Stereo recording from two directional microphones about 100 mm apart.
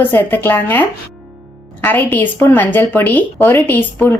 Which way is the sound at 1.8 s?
20° left (ahead or behind).